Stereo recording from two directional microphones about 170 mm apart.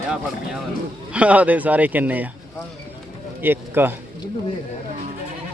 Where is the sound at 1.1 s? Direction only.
10° right (ahead or behind).